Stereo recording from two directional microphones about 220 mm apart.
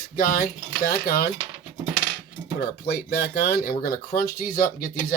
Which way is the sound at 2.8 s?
45° left (ahead or behind).